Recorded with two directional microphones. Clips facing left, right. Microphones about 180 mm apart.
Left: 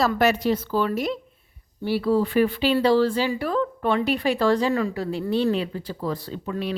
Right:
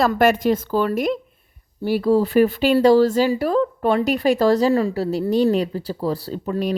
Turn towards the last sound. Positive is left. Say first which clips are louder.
# right 5 dB
turn(degrees=-40)  # may be behind; listen again after turning